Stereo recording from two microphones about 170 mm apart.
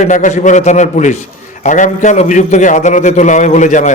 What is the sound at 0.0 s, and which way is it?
A man's voice, 45° left (ahead or behind).